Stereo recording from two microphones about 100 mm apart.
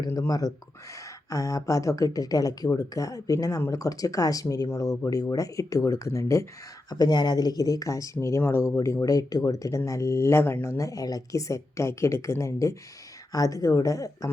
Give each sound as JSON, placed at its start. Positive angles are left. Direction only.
{"t": 0.1, "sound": "speech", "side_deg": 35}
{"t": 6.9, "sound": "speech", "side_deg": 40}